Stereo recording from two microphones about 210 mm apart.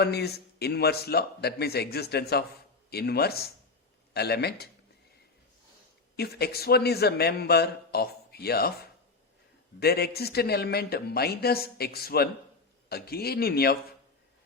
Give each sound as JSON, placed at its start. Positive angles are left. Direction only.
{"t": 0.0, "sound": "a man's voice", "side_deg": 50}
{"t": 6.1, "sound": "a man's voice", "side_deg": 50}
{"t": 9.8, "sound": "a man's voice", "side_deg": 50}